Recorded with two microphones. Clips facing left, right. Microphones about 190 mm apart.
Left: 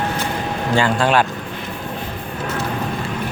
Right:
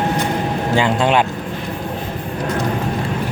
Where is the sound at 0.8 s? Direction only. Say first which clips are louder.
Right 1 dB; 20° right (ahead or behind).